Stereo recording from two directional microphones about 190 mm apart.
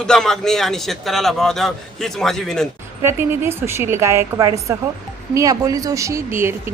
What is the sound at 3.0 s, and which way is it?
Speech, 15° right (ahead or behind).